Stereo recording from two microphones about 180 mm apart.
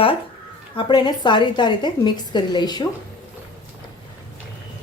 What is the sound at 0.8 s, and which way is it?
A woman's voice, 25° left (ahead or behind).